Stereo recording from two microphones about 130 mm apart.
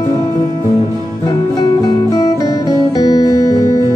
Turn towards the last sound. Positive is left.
turn(degrees=30)  # may be behind; listen again after turning